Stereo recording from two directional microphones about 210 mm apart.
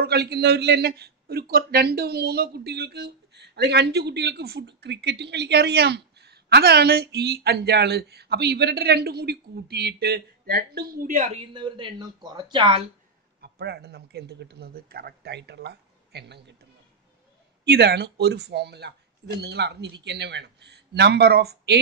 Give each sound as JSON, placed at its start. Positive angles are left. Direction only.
{"t": 0.0, "sound": "a man's voice", "side_deg": -50}
{"t": 11.5, "sound": "speech", "side_deg": -20}
{"t": 13.4, "sound": "a man's voice", "side_deg": -50}
{"t": 17.6, "sound": "a man's voice", "side_deg": -50}